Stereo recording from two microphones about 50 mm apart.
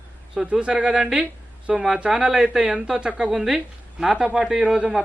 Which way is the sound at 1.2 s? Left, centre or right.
Right.